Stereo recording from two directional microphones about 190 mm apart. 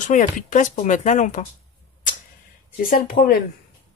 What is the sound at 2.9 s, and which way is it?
Speech, 50° left (ahead or behind).